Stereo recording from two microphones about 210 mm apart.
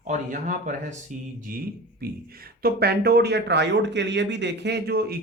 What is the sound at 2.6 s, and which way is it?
Speech, 50° right (ahead or behind).